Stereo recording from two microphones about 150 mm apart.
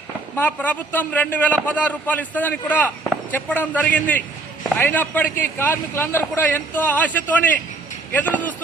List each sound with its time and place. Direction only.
0.3 s a man's voice: 10° left (ahead or behind)